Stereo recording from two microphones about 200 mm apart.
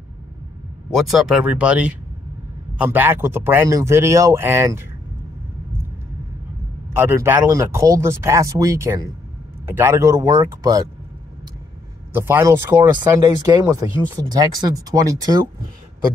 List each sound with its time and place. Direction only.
0.8 s speech: centre (ahead or behind)
7.0 s speech: 10° right (ahead or behind)
12.1 s speech: 10° right (ahead or behind)